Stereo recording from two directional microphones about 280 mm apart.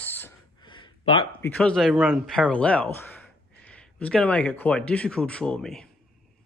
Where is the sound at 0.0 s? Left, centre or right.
Centre.